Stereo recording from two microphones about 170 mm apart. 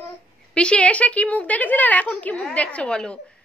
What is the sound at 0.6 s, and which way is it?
A woman's voice, 5° left (ahead or behind).